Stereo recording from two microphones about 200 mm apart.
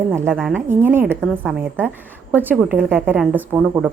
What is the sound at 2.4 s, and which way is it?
A woman's voice, 10° right (ahead or behind).